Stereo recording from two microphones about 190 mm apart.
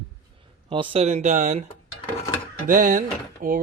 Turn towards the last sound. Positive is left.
turn(degrees=-45)  # may be behind; listen again after turning